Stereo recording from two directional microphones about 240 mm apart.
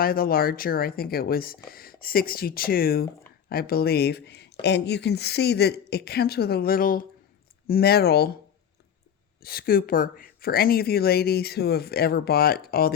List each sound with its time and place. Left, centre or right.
0.0 s speech: left
9.4 s speech: left